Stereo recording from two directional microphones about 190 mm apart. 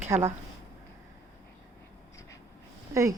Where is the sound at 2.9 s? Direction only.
15° right (ahead or behind).